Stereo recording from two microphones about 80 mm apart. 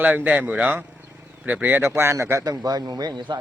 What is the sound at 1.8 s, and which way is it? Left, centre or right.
Speech, right.